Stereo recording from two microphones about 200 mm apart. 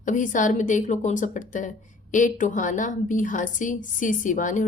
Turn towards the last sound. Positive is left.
turn(degrees=40)  # may be behind; listen again after turning